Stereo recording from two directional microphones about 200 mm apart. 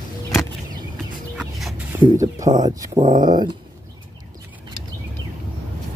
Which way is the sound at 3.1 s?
40° right (ahead or behind).